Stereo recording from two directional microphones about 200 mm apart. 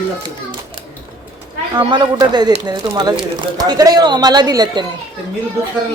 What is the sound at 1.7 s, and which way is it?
Speech, 20° right (ahead or behind).